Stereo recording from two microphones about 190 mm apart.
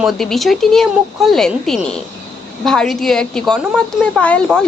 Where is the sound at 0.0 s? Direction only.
Centre (ahead or behind).